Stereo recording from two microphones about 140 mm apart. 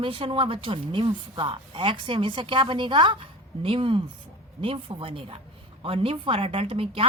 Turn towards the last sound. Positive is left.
turn(degrees=-45)  # may be behind; listen again after turning